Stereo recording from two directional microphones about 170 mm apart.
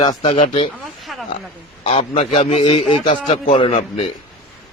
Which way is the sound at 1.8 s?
40° left (ahead or behind).